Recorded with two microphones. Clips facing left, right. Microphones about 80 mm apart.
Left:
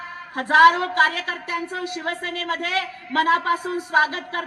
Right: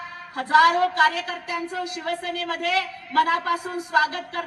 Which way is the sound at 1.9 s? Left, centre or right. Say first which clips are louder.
Even; left.